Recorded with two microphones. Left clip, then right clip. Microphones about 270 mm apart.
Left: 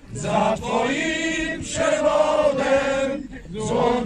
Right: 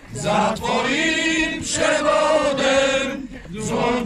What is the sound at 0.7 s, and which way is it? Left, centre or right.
Choir, centre.